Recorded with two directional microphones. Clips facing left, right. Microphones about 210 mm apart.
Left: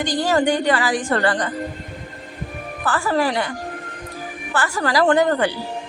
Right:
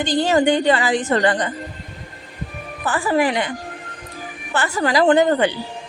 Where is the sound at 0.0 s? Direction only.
25° right (ahead or behind).